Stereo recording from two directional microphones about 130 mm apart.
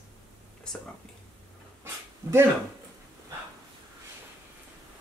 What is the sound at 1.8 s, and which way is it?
Dog, 20° right (ahead or behind).